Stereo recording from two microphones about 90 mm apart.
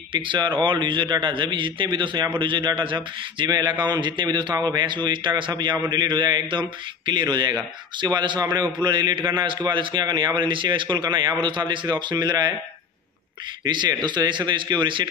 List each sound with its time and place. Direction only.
0.1 s a man's voice: 65° right (ahead or behind)
3.4 s a man's voice: 50° right (ahead or behind)
13.7 s a man's voice: 55° right (ahead or behind)